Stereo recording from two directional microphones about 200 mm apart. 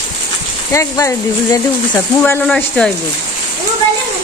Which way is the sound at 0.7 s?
15° left (ahead or behind).